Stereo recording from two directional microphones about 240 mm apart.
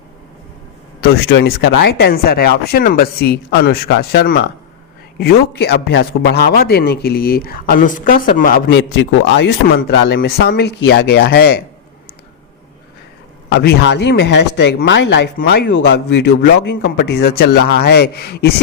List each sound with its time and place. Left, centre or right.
1.0 s a man's voice: left
13.5 s speech: left